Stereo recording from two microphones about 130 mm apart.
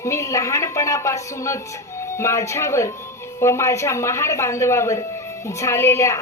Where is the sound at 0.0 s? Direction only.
25° left (ahead or behind).